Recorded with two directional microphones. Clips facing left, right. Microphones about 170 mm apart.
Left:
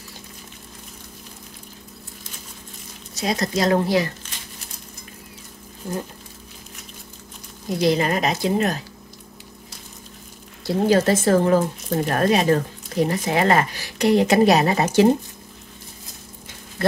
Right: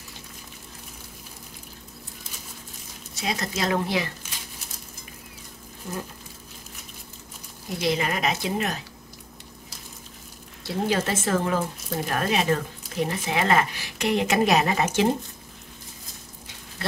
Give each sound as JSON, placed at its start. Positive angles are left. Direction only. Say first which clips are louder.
{"t": 3.2, "sound": "speech", "louder": "left 6 dB", "side_deg": 40}
{"t": 7.8, "sound": "speech", "louder": "left 5 dB", "side_deg": 35}
{"t": 10.6, "sound": "speech", "louder": "left 7 dB", "side_deg": 40}